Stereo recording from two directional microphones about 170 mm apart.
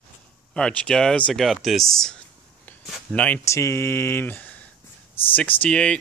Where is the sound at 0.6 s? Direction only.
5° left (ahead or behind).